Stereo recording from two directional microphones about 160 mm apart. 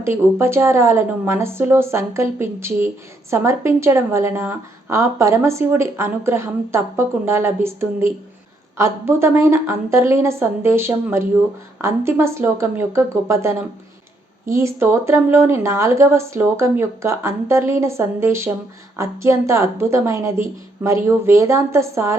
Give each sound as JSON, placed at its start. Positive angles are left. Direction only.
{"t": 0.0, "sound": "a woman's voice", "side_deg": -15}